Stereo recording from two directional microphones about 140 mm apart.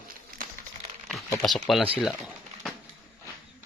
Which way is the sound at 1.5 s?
Centre (ahead or behind).